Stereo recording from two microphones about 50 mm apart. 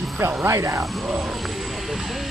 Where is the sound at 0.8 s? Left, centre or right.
Centre.